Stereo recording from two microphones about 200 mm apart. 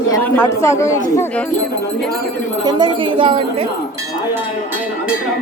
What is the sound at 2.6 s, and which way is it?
Speech, 20° right (ahead or behind).